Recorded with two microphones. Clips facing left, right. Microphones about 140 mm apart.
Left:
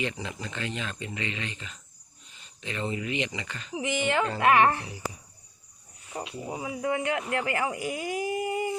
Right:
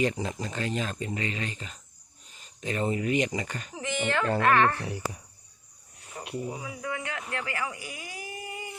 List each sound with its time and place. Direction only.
0.0 s speech: 40° right (ahead or behind)
3.8 s a child's voice: 15° left (ahead or behind)
4.8 s a child's voice: 55° right (ahead or behind)
6.1 s cricket: 25° left (ahead or behind)
6.5 s speech: 25° left (ahead or behind)